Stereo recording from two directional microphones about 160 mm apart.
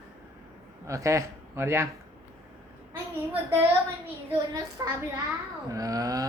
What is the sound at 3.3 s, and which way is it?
Speech, 15° right (ahead or behind).